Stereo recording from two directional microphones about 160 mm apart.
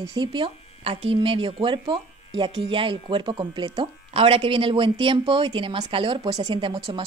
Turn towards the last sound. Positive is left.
turn(degrees=-30)  # may be behind; listen again after turning